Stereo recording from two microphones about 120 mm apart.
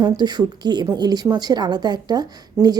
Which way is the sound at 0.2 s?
35° right (ahead or behind).